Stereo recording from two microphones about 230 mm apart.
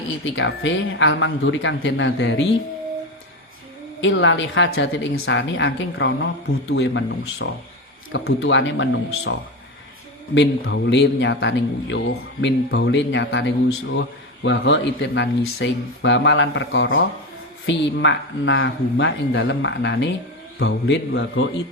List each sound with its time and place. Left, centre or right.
0.3 s speech: left
4.0 s speech: left
10.3 s speech: left